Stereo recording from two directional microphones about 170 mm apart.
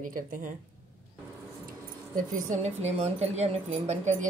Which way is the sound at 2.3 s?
45° right (ahead or behind).